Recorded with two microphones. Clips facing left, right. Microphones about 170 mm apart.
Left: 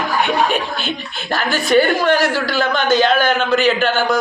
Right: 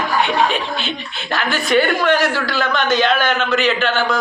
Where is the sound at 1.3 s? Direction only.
40° left (ahead or behind).